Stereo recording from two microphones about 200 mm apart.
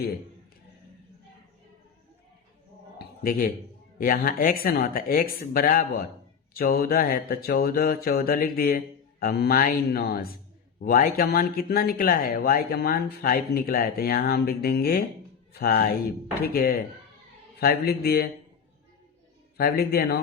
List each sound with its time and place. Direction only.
3.0 s a sound: 45° left (ahead or behind)
3.9 s speech: 45° left (ahead or behind)
19.5 s speech: 50° left (ahead or behind)